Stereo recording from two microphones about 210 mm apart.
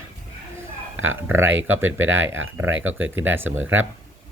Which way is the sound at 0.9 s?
70° right (ahead or behind).